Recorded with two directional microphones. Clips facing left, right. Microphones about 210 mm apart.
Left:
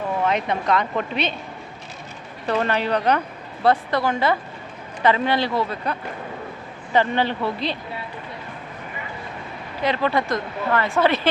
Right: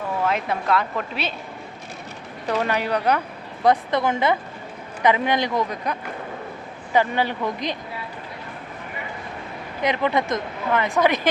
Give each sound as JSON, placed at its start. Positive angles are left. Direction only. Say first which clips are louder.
{"t": 0.3, "sound": "speech", "louder": "even", "side_deg": -5}
{"t": 2.5, "sound": "a woman's voice", "louder": "left 1 dB", "side_deg": -10}
{"t": 9.8, "sound": "speech", "louder": "even", "side_deg": -15}